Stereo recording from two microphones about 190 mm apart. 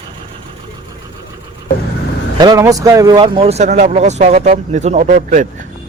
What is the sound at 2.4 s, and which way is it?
A man's voice, 20° right (ahead or behind).